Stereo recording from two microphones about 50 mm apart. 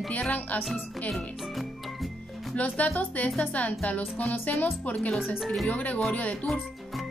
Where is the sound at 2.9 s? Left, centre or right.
Left.